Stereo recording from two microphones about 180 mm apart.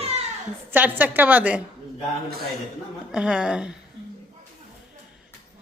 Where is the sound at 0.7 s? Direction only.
10° right (ahead or behind).